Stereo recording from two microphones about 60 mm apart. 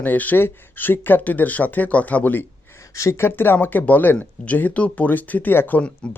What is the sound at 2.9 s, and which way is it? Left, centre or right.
Speech, left.